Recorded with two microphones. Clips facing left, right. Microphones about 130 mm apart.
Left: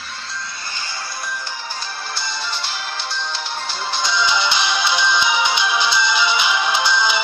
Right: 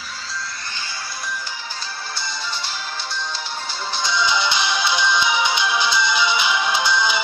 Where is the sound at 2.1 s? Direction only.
75° left (ahead or behind).